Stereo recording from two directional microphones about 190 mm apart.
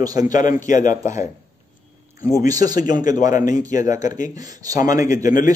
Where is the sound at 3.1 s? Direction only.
40° left (ahead or behind).